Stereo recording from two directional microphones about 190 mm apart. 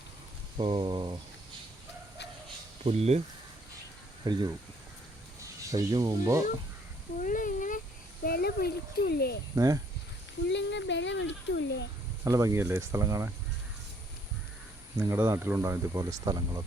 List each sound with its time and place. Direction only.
0.6 s speech: 25° right (ahead or behind)
2.8 s speech: 35° right (ahead or behind)
4.3 s speech: 20° right (ahead or behind)
5.7 s speech: 20° right (ahead or behind)
7.2 s a sound: 45° left (ahead or behind)
8.2 s speech: 55° left (ahead or behind)
9.6 s speech: 20° right (ahead or behind)
10.5 s speech: 70° left (ahead or behind)
12.2 s speech: 15° right (ahead or behind)
15.0 s speech: 15° right (ahead or behind)